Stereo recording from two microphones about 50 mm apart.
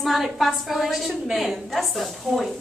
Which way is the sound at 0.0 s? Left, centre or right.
Centre.